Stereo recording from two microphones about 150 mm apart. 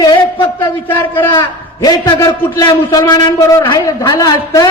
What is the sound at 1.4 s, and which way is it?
A man's voice, 25° left (ahead or behind).